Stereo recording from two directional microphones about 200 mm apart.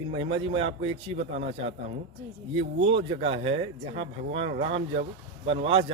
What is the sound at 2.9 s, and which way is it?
Speech, 25° right (ahead or behind).